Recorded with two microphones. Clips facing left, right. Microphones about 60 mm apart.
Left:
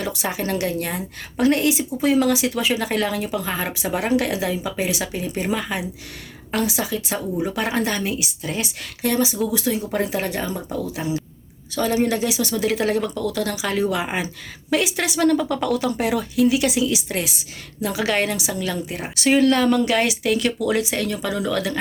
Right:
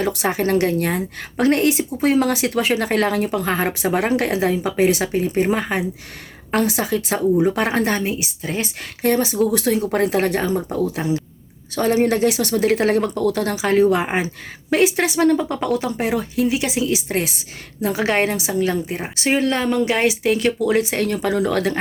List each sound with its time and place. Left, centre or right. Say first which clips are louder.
0.0 s a woman's voice: right 5 dB; right